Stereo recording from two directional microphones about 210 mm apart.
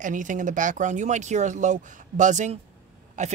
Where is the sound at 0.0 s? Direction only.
40° right (ahead or behind).